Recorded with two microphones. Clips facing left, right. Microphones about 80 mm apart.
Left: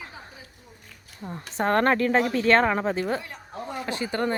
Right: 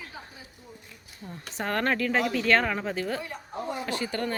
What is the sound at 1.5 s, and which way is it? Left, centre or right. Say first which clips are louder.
A woman's voice: left 6 dB; left.